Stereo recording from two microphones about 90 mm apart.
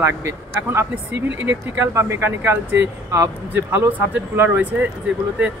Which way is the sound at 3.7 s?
20° right (ahead or behind).